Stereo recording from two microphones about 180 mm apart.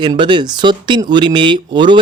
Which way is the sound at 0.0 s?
25° right (ahead or behind).